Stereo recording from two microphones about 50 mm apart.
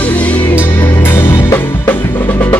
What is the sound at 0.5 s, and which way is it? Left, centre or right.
Music, left.